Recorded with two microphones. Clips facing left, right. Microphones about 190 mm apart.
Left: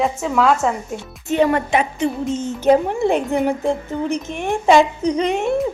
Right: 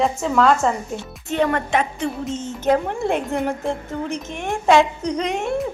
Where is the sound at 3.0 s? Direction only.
25° left (ahead or behind).